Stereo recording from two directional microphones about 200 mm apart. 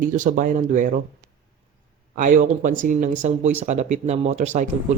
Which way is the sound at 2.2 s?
40° right (ahead or behind).